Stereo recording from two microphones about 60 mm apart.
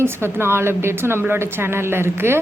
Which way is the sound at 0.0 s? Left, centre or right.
Right.